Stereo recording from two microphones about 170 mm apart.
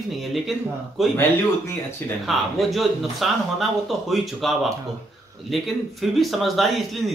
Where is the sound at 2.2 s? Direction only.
Centre (ahead or behind).